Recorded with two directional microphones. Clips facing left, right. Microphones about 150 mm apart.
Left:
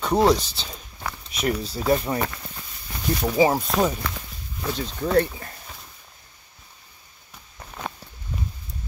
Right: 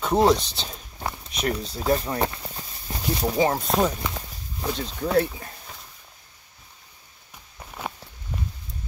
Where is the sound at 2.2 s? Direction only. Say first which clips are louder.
Right 3 dB; 30° right (ahead or behind).